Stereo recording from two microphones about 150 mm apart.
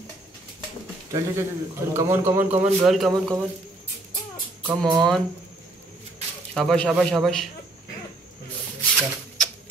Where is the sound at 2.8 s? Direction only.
Centre (ahead or behind).